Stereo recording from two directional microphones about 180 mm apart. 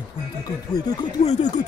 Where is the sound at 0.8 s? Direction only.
20° left (ahead or behind).